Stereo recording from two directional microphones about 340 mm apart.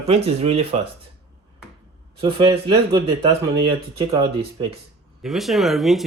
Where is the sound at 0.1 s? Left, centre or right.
Centre.